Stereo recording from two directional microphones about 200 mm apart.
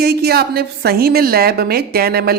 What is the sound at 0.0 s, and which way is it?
A woman's voice, 50° right (ahead or behind).